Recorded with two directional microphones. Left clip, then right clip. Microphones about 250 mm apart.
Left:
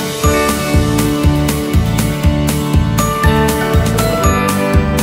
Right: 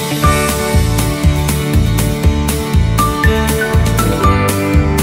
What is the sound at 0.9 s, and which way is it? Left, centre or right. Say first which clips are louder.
Music: left 3 dB; centre.